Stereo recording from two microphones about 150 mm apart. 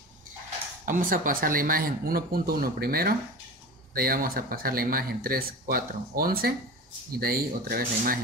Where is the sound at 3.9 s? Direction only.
75° right (ahead or behind).